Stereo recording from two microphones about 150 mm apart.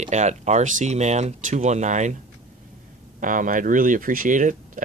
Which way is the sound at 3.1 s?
60° right (ahead or behind).